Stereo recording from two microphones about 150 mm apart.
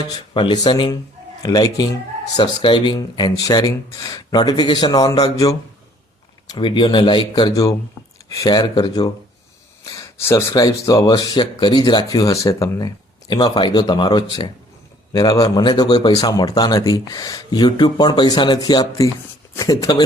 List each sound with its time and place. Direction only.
0.1 s speech: 30° left (ahead or behind)